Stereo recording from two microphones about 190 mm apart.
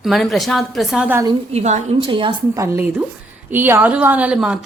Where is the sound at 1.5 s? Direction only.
35° right (ahead or behind).